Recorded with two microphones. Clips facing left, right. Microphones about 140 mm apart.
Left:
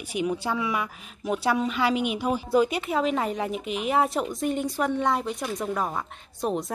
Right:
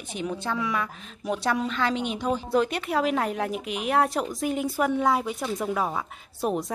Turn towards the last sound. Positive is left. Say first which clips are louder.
# right 1 dB
turn(degrees=-5)  # may be behind; listen again after turning